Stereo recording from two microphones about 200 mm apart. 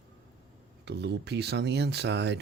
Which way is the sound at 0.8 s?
55° right (ahead or behind).